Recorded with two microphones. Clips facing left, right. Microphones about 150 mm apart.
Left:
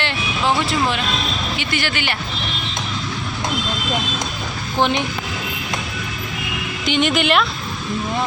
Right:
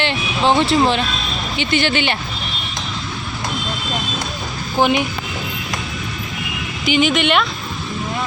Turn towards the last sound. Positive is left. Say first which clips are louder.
# right 1 dB
turn(degrees=0)  # may be behind; listen again after turning